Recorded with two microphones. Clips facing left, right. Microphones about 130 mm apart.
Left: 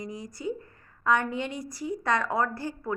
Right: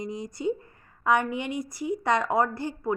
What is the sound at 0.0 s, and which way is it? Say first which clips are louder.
A woman's voice: right 5 dB; 20° right (ahead or behind).